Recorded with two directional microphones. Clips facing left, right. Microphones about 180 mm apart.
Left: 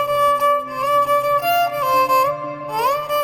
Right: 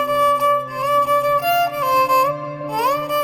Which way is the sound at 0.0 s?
Centre (ahead or behind).